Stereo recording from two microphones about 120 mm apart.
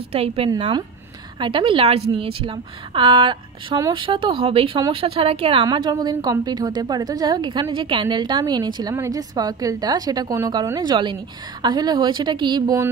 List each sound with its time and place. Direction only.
0.1 s a woman's voice: 55° right (ahead or behind)
1.4 s a woman's voice: 45° right (ahead or behind)
8.9 s speech: 25° right (ahead or behind)
9.3 s a woman's voice: 35° right (ahead or behind)